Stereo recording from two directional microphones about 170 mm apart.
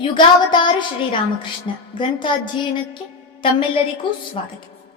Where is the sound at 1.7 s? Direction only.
35° left (ahead or behind).